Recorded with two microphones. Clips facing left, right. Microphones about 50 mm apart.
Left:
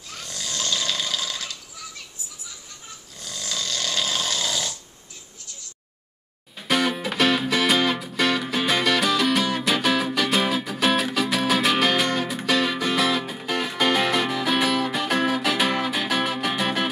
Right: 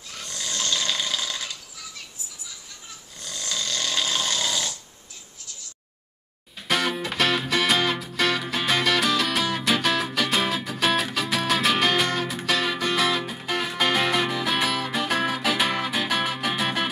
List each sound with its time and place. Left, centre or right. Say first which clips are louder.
0.2 s snoring: even; centre
3.2 s snoring: even; centre
6.7 s music: left 2 dB; centre